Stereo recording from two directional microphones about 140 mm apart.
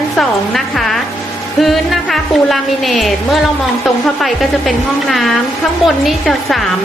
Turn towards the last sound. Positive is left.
turn(degrees=0)  # may be behind; listen again after turning